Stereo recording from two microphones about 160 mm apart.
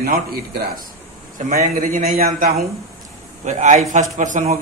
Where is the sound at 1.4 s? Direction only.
55° right (ahead or behind).